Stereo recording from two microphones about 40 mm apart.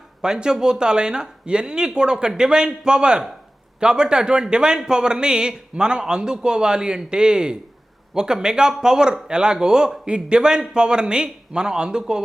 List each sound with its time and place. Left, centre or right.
0.2 s speech: centre